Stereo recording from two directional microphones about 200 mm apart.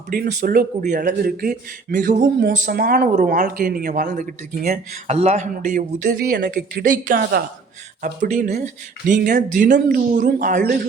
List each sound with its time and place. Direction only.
0.1 s speech: 40° right (ahead or behind)
5.0 s speech: 35° right (ahead or behind)